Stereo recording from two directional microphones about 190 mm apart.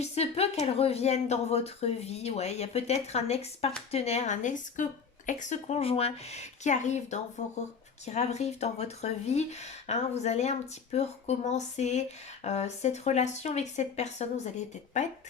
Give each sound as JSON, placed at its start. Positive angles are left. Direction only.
{"t": 0.0, "sound": "speech", "side_deg": 35}